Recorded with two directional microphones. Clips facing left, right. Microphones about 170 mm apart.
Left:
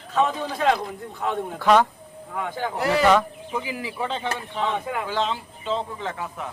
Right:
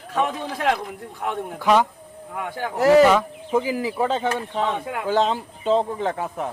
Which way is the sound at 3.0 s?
10° right (ahead or behind).